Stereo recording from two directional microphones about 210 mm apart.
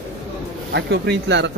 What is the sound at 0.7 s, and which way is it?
Speech, 55° right (ahead or behind).